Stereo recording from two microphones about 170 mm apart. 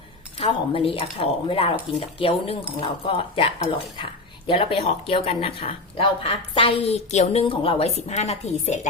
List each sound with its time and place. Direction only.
0.3 s speech: 30° left (ahead or behind)